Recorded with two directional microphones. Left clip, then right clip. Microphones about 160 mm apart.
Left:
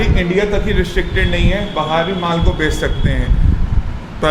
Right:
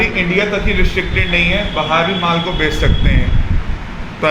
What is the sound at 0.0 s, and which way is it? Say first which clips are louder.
A man's voice: right 2 dB; 60° left (ahead or behind).